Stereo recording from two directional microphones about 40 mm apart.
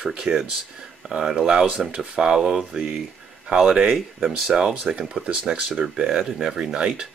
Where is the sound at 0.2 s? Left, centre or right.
Centre.